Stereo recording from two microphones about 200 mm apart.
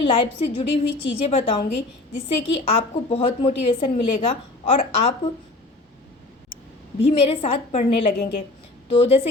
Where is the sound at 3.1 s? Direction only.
30° left (ahead or behind).